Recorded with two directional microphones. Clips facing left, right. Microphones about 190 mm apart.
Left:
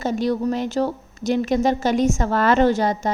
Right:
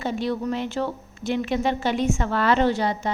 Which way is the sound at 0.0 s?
40° left (ahead or behind).